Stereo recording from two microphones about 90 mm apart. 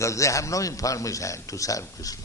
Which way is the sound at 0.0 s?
35° left (ahead or behind).